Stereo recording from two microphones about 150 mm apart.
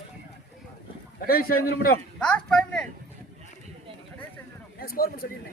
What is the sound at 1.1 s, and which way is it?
Speech, 80° left.